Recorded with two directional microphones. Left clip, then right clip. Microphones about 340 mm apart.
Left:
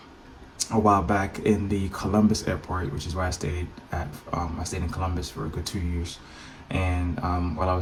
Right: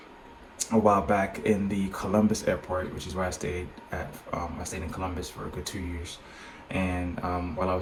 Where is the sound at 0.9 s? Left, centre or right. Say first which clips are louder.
Left 2 dB; centre.